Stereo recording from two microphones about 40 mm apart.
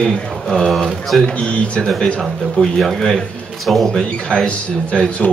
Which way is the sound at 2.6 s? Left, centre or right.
Centre.